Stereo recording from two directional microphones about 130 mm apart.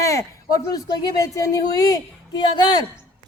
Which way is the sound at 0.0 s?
25° left (ahead or behind).